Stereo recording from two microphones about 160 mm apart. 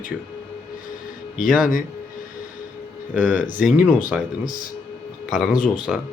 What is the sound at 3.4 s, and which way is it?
Speech, 55° left (ahead or behind).